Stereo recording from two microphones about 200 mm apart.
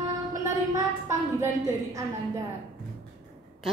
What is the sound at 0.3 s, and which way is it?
A woman's voice, 15° right (ahead or behind).